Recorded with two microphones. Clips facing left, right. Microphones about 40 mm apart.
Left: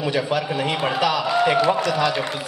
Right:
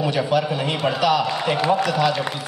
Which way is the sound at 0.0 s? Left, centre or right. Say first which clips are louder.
Right 2 dB; centre.